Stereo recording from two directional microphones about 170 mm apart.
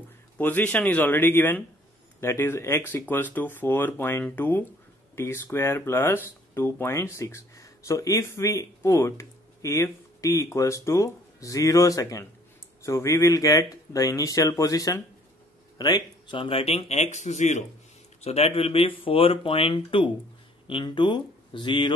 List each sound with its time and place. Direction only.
0.4 s speech: 10° left (ahead or behind); by 21.9 s 30° left (ahead or behind)